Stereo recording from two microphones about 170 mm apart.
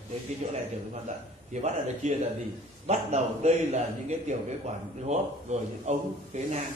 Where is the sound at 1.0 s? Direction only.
45° right (ahead or behind).